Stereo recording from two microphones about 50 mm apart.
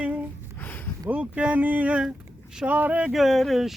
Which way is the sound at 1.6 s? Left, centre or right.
Right.